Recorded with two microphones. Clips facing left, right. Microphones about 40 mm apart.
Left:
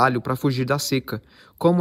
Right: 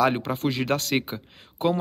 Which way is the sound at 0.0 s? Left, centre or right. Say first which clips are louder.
Left 3 dB; right.